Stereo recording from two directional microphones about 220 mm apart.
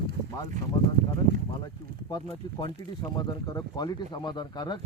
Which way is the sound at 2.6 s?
20° left (ahead or behind).